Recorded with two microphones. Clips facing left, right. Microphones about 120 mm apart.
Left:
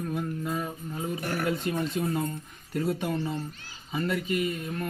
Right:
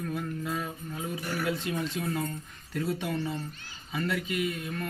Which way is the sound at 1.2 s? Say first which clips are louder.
Left 2 dB; 55° left (ahead or behind).